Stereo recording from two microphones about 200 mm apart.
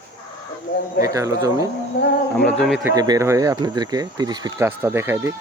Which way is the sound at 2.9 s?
20° right (ahead or behind).